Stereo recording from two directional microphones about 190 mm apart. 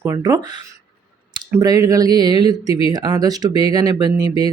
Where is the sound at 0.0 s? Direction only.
15° right (ahead or behind).